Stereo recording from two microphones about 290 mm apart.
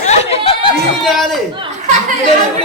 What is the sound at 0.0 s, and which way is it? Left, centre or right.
Chatter, left.